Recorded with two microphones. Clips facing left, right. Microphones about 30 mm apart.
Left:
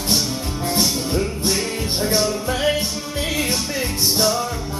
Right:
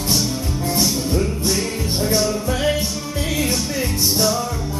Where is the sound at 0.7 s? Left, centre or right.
Centre.